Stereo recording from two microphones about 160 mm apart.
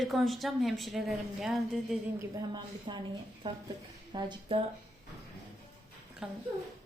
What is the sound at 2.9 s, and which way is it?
A woman's voice, 35° right (ahead or behind).